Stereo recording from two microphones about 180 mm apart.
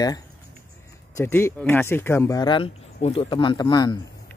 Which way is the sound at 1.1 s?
15° left (ahead or behind).